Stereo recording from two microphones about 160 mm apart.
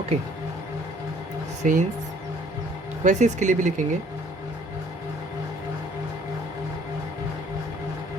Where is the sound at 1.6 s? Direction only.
55° right (ahead or behind).